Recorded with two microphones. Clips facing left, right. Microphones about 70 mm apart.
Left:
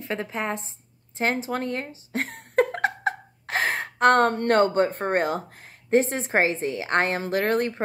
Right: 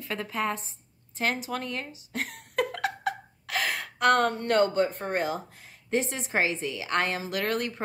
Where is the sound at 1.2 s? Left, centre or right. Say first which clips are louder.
Left 4 dB; left.